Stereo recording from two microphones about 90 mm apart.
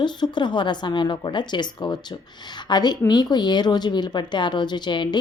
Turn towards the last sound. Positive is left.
turn(degrees=60)  # may be behind; listen again after turning